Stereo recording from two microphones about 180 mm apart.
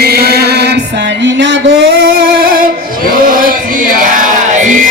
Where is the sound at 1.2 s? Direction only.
80° right.